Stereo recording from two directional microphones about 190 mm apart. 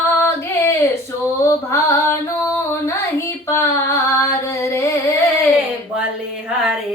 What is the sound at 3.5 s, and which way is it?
Music, 15° left (ahead or behind).